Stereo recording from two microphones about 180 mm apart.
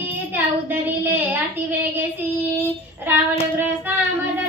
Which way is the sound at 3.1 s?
10° right (ahead or behind).